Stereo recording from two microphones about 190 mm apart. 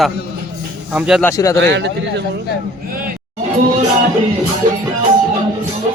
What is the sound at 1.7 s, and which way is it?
Speech, 65° right (ahead or behind).